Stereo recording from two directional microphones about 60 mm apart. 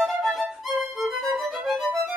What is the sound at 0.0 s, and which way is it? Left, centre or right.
Music, centre.